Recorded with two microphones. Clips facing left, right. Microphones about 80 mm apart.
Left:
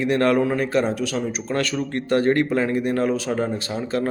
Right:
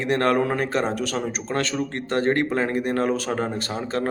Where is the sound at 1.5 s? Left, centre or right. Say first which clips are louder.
Left 1 dB; right.